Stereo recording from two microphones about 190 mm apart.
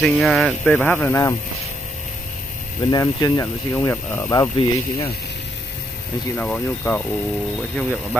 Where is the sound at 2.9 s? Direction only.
20° left (ahead or behind).